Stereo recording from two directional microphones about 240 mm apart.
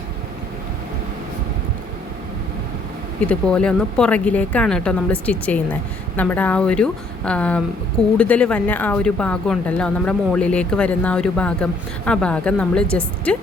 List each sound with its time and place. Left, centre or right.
3.2 s speech: centre